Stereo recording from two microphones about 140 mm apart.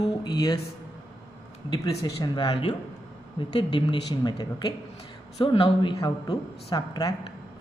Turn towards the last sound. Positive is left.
turn(degrees=30)  # may be behind; listen again after turning